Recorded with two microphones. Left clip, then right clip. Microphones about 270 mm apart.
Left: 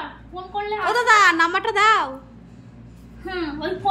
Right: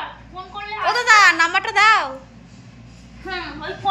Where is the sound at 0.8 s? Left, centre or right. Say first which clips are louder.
Right 3 dB; centre.